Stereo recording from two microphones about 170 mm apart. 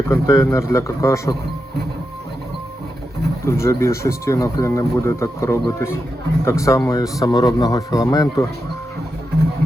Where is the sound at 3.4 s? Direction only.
15° left (ahead or behind).